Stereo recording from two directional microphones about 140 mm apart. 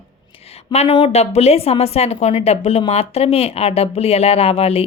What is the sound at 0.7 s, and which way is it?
A woman's voice, 50° left (ahead or behind).